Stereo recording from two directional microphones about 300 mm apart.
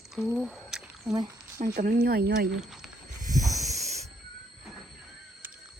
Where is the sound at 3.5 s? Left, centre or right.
Right.